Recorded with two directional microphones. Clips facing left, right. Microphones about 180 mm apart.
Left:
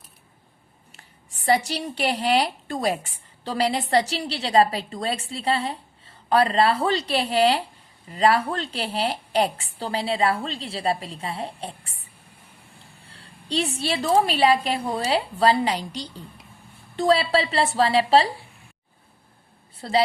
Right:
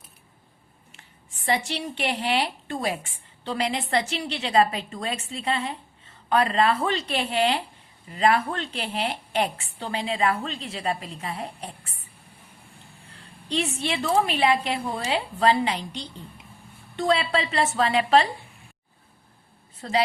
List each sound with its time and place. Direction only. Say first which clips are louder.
1.5 s a woman's voice: left 4 dB; 40° left (ahead or behind)
13.1 s a woman's voice: left 1 dB; 35° left (ahead or behind)